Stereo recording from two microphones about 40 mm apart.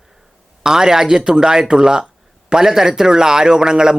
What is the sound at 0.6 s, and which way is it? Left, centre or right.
Speech, centre.